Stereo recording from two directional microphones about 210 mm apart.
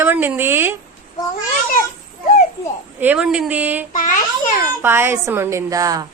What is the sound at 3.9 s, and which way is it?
Speech, 40° left (ahead or behind).